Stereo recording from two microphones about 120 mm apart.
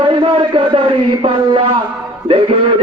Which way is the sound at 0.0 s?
45° right (ahead or behind).